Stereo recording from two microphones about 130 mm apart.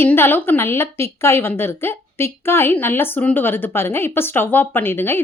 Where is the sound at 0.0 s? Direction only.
15° left (ahead or behind).